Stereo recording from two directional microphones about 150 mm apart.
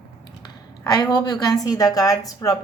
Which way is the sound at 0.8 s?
30° left (ahead or behind).